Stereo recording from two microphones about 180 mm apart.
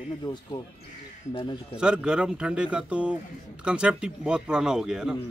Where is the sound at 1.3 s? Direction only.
25° left (ahead or behind).